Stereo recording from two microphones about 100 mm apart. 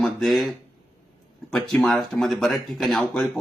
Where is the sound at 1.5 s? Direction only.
5° left (ahead or behind).